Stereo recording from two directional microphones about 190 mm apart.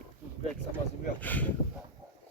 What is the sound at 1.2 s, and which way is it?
Speech, 10° left (ahead or behind).